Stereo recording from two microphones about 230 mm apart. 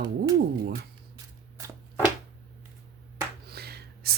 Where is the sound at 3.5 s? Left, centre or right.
Right.